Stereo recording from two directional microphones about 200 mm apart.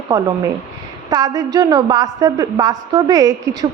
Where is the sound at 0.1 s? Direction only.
15° right (ahead or behind).